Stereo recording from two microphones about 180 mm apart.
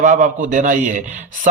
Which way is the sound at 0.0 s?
40° right (ahead or behind).